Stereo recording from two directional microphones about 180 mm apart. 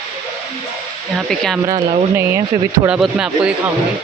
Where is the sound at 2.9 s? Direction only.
5° right (ahead or behind).